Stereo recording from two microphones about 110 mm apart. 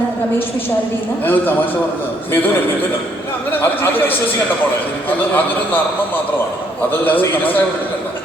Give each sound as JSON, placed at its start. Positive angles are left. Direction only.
{"t": 1.2, "sound": "a man's voice", "side_deg": 20}
{"t": 7.0, "sound": "a man's voice", "side_deg": 15}